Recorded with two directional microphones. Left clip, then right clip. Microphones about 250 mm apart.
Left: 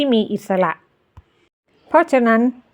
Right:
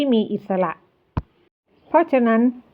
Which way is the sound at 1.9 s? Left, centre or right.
Left.